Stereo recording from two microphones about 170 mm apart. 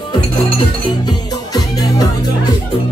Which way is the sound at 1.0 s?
20° left (ahead or behind).